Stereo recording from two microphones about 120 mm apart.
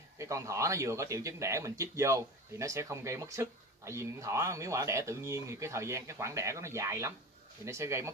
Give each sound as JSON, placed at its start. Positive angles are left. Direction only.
{"t": 0.2, "sound": "speech", "side_deg": -25}